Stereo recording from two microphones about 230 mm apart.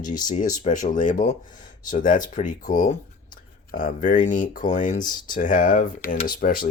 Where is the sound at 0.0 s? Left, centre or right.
Left.